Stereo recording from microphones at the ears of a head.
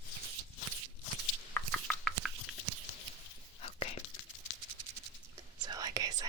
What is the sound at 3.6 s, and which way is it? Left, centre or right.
Whispering, left.